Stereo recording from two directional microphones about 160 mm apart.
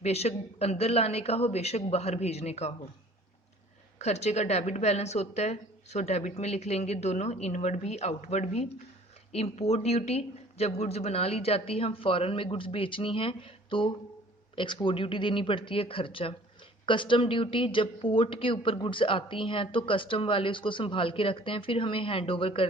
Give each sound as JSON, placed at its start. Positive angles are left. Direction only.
{"t": 0.0, "sound": "speech", "side_deg": 40}
{"t": 3.9, "sound": "a woman's voice", "side_deg": 45}